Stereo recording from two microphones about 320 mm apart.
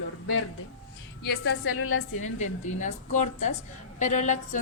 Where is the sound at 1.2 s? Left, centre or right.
Left.